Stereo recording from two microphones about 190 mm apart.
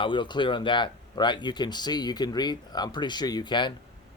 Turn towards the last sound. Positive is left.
turn(degrees=25)  # may be behind; listen again after turning